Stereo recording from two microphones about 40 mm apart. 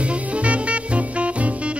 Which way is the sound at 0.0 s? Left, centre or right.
Right.